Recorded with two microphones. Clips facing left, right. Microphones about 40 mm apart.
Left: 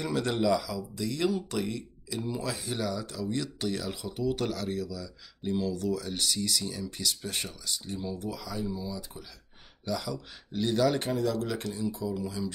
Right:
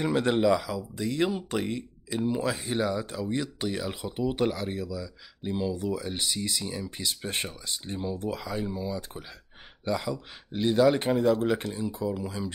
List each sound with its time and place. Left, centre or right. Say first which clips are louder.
0.0 s speech: right 4 dB; right